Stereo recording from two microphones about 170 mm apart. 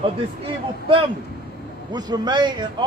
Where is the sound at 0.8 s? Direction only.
30° right (ahead or behind).